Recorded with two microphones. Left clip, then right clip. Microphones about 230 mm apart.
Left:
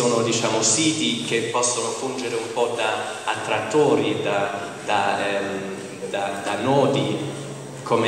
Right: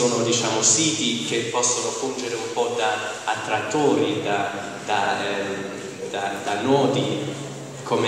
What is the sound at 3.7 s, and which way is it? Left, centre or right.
A man's voice, left.